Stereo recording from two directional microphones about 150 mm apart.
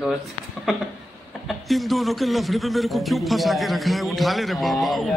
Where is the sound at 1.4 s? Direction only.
Centre (ahead or behind).